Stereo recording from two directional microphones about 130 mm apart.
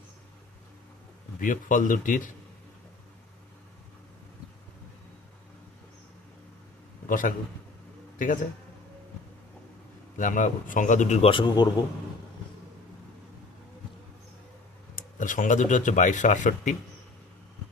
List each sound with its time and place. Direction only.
1.4 s speech: 90° left
7.1 s speech: 90° left
10.2 s speech: 80° left
11.3 s speech: 35° left (ahead or behind)
14.9 s speech: 85° left